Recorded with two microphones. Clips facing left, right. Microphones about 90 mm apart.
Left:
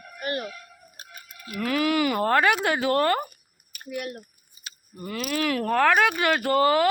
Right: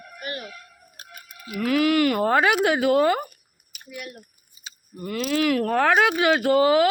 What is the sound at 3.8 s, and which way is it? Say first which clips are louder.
Speech: left 5 dB; 45° left (ahead or behind).